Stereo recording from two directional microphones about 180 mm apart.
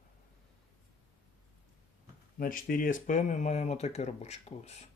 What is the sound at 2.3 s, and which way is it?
Speech, 50° left (ahead or behind).